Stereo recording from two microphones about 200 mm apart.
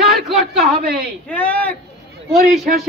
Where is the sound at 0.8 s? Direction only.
50° right (ahead or behind).